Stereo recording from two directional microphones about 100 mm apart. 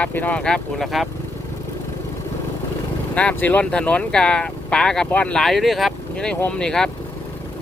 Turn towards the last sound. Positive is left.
turn(degrees=5)  # may be behind; listen again after turning